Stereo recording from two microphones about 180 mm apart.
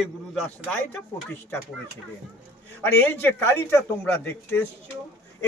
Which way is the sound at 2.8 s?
10° left (ahead or behind).